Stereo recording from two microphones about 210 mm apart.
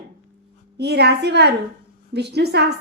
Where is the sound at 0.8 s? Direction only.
50° right (ahead or behind).